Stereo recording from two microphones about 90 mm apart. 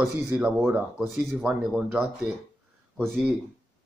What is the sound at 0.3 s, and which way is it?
Speech, 20° right (ahead or behind).